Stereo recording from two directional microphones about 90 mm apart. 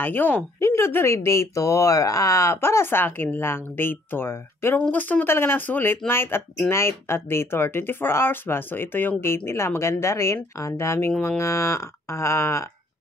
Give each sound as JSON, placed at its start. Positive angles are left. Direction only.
{"t": 0.0, "sound": "speech", "side_deg": 20}